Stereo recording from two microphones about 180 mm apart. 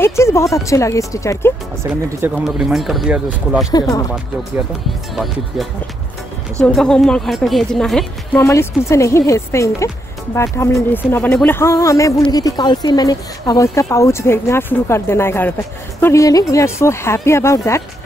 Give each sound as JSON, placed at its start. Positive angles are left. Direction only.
{"t": 0.0, "sound": "speech", "side_deg": 15}
{"t": 1.8, "sound": "a woman's voice", "side_deg": -10}
{"t": 3.7, "sound": "speech", "side_deg": 20}
{"t": 5.1, "sound": "a woman's voice", "side_deg": 0}
{"t": 8.4, "sound": "speech", "side_deg": 15}